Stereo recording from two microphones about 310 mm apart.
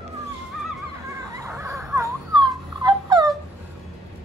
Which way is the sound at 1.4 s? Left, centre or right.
Centre.